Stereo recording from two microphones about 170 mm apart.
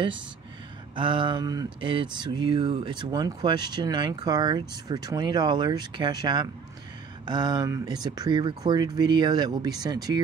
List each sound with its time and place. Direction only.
0.9 s speech: 30° right (ahead or behind)